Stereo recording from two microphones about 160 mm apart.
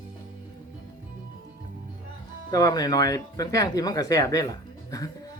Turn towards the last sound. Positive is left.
turn(degrees=20)  # may be behind; listen again after turning